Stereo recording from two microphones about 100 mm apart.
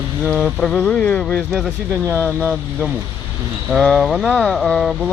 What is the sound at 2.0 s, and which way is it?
Speech, 20° right (ahead or behind).